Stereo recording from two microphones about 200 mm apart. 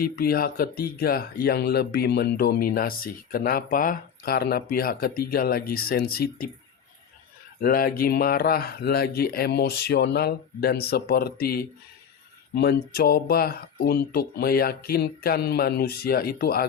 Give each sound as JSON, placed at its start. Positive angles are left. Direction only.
{"t": 0.0, "sound": "speech", "side_deg": 50}
{"t": 7.6, "sound": "speech", "side_deg": 45}